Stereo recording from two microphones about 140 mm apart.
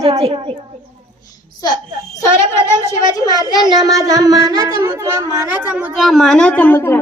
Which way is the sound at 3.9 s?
25° right (ahead or behind).